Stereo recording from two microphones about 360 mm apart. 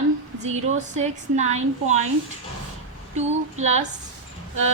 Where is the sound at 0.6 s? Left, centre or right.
Centre.